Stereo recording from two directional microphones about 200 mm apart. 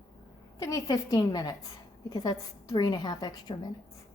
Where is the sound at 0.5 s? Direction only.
15° left (ahead or behind).